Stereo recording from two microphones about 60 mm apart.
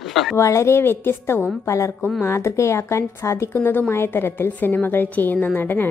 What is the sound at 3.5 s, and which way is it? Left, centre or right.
A woman's voice, left.